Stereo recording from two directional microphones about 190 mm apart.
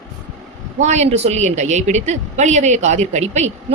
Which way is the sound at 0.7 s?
35° right (ahead or behind).